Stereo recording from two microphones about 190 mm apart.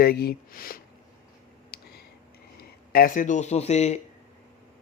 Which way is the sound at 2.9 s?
45° left (ahead or behind).